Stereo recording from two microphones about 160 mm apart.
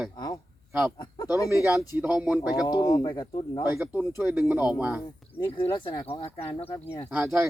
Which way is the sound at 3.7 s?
10° right (ahead or behind).